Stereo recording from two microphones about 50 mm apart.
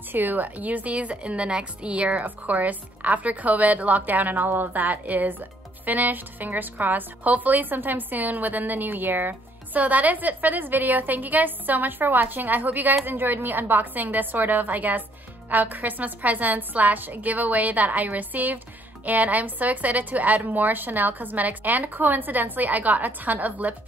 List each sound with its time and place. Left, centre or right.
0.1 s a woman's voice: right